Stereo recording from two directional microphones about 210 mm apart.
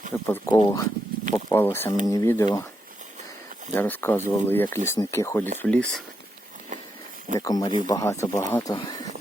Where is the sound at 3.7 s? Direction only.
10° left (ahead or behind).